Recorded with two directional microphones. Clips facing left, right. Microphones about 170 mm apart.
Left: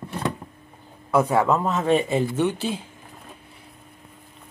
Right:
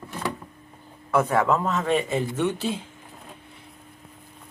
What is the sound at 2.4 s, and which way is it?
Speech, centre (ahead or behind).